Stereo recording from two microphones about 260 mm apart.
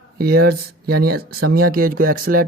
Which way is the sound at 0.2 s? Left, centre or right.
Right.